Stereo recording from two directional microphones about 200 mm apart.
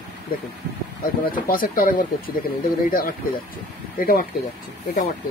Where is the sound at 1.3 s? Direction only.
45° left (ahead or behind).